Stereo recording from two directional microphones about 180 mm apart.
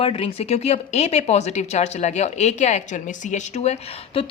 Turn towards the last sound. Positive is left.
turn(degrees=35)  # may be behind; listen again after turning